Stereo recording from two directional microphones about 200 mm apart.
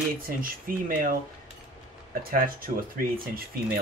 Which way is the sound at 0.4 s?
45° right (ahead or behind).